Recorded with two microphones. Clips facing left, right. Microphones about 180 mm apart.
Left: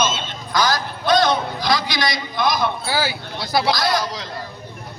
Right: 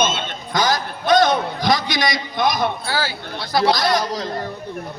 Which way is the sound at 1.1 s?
50° right (ahead or behind).